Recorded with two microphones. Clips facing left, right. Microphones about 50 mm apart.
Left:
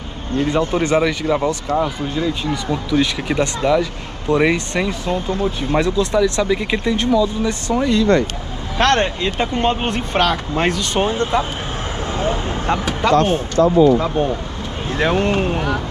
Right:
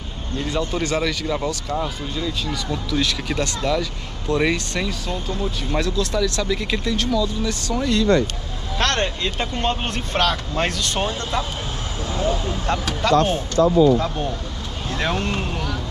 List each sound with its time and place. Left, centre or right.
0.4 s speech: left
12.1 s vehicle: left
12.6 s speech: centre